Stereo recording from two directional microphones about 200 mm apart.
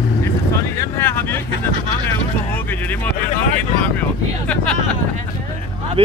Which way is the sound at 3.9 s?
5° left (ahead or behind).